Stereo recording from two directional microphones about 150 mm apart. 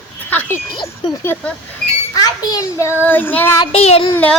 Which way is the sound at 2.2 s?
25° left (ahead or behind).